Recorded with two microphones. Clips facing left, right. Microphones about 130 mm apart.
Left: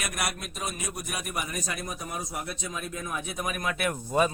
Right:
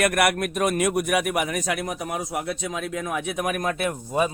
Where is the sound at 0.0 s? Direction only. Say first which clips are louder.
Right 12 dB; 65° right (ahead or behind).